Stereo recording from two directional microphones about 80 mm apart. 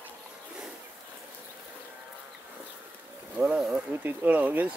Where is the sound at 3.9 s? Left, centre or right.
Right.